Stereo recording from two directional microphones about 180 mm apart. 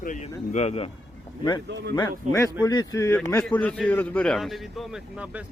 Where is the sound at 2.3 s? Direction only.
20° left (ahead or behind); by 5.4 s 5° right (ahead or behind).